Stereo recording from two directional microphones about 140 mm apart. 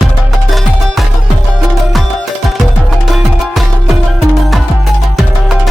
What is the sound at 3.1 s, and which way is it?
Music, centre (ahead or behind).